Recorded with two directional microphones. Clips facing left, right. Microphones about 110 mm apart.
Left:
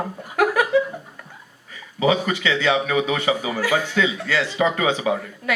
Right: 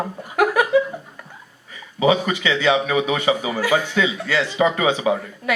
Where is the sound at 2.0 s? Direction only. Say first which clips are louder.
Right 2 dB; 20° right (ahead or behind).